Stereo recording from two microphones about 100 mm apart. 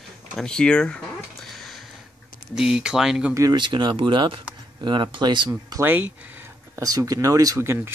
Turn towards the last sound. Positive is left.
turn(degrees=-30)  # may be behind; listen again after turning